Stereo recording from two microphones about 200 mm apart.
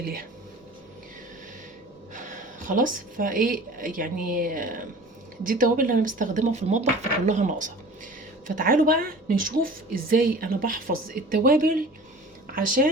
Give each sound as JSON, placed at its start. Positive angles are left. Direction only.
{"t": 0.0, "sound": "a woman's voice", "side_deg": -50}
{"t": 2.1, "sound": "a woman's voice", "side_deg": -40}